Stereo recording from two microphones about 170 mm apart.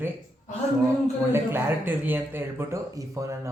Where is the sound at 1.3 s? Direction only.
15° right (ahead or behind).